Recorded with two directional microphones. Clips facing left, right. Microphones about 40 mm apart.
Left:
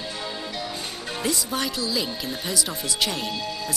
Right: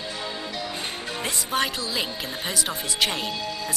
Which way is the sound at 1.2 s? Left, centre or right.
Right.